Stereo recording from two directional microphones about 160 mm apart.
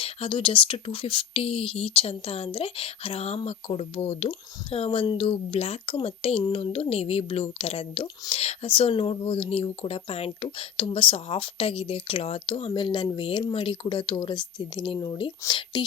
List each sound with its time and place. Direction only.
0.0 s speech: 35° left (ahead or behind)